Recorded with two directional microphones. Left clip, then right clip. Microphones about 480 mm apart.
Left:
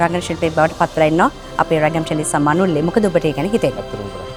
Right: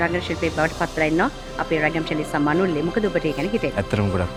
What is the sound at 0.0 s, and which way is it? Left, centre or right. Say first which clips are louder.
Speech: left 5 dB; centre.